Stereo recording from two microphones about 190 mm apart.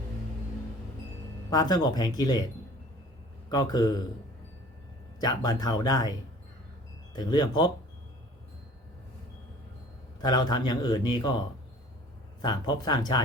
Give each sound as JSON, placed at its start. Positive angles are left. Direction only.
{"t": 1.5, "sound": "a man's voice", "side_deg": 20}
{"t": 3.5, "sound": "a man's voice", "side_deg": 20}
{"t": 5.2, "sound": "a man's voice", "side_deg": 20}
{"t": 10.2, "sound": "a man's voice", "side_deg": 20}